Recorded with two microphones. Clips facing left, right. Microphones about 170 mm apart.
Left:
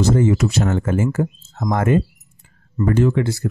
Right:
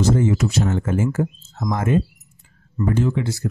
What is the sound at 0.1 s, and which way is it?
Speech, 70° left (ahead or behind).